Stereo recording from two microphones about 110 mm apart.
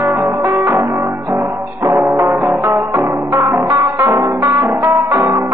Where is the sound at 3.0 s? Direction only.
25° right (ahead or behind).